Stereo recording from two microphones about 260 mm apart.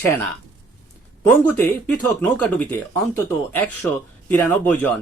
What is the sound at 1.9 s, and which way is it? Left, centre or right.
Speech, centre.